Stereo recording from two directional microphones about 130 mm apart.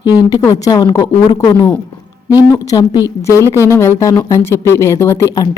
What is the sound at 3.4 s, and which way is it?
Speech, 20° right (ahead or behind).